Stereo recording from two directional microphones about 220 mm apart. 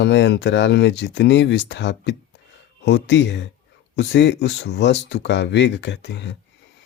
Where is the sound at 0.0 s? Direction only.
50° left (ahead or behind).